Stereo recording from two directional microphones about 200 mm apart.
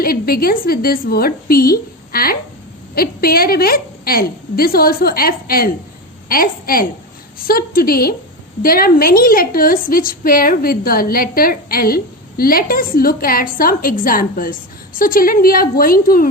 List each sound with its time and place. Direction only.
0.0 s a woman's voice: 50° left (ahead or behind)